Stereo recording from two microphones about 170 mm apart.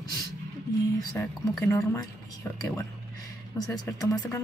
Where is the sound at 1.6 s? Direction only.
15° left (ahead or behind).